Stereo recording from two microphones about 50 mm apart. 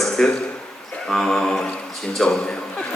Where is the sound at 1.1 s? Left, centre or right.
Centre.